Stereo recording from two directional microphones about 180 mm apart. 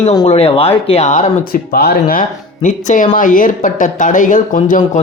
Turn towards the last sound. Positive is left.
turn(degrees=45)  # may be behind; listen again after turning